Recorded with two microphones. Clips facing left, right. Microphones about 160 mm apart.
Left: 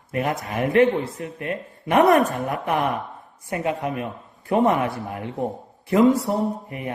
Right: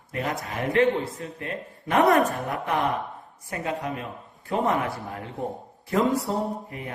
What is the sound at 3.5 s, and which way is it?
Speech, 25° left (ahead or behind).